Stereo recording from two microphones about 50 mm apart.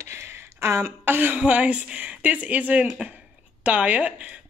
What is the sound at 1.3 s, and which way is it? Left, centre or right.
A woman's voice, right.